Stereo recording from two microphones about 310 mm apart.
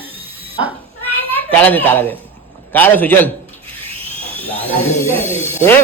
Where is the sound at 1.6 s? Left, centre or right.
Centre.